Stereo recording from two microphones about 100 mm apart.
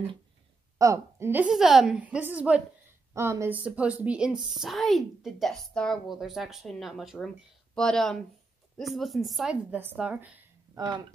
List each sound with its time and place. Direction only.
0.7 s a woman's voice: 35° right (ahead or behind)
1.5 s speech: 5° right (ahead or behind)
2.0 s a woman's voice: 15° right (ahead or behind)
3.1 s speech: 25° right (ahead or behind); by 9.5 s centre (ahead or behind)
9.5 s a woman's voice: 15° right (ahead or behind)
10.7 s speech: 40° right (ahead or behind)